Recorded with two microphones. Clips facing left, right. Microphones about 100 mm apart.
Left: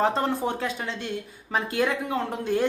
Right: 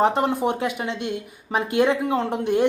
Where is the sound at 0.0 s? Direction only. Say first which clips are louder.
Right 4 dB; 20° right (ahead or behind).